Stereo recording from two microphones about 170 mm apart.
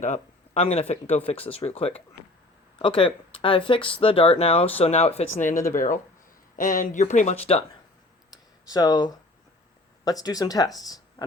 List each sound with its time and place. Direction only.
0.0 s speech: 40° left (ahead or behind)
8.7 s speech: 25° left (ahead or behind)